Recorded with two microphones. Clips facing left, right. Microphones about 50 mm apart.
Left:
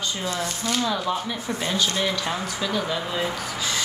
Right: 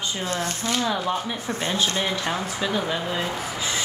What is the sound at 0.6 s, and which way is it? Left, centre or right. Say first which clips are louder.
Speech: even; centre.